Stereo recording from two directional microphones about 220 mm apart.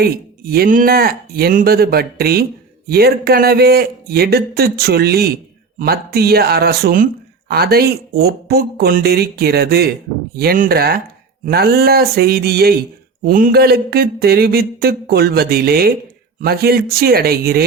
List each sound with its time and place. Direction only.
0.0 s speech: 45° right (ahead or behind)